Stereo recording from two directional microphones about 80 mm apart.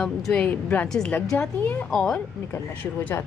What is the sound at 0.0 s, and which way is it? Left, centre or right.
Speech, centre.